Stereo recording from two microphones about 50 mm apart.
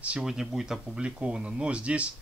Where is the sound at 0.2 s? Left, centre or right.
Centre.